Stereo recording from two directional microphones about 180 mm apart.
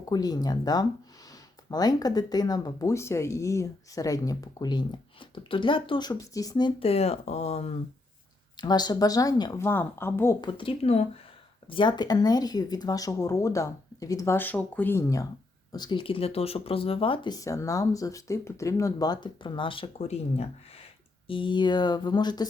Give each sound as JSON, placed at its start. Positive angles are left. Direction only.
{"t": 0.0, "sound": "speech", "side_deg": 20}
{"t": 8.6, "sound": "speech", "side_deg": 25}
{"t": 10.4, "sound": "speech", "side_deg": 30}